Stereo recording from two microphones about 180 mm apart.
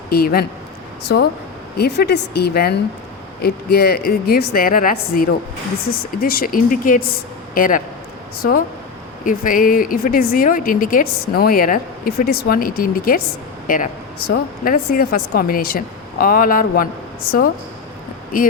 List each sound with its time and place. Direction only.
0.1 s a woman's voice: 60° left (ahead or behind)